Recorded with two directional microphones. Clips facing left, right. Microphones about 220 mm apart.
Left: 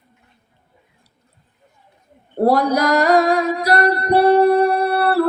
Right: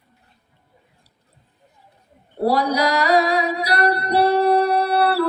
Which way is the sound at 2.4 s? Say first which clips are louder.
Left 3 dB; 50° left (ahead or behind).